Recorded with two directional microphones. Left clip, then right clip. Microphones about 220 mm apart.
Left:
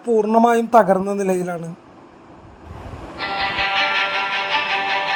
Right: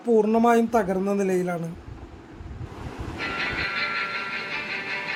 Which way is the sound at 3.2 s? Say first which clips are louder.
Left 6 dB; 20° left (ahead or behind).